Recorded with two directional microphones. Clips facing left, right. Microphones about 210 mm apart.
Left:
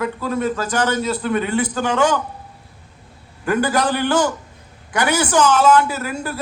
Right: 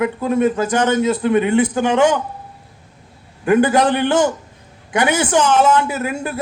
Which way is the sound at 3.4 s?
25° right (ahead or behind).